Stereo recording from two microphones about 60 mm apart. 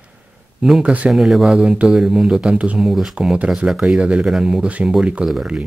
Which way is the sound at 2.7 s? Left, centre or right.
Centre.